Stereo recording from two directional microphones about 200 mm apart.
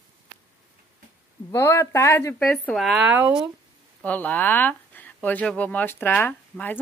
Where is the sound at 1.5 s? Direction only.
15° left (ahead or behind); by 3.4 s 10° right (ahead or behind).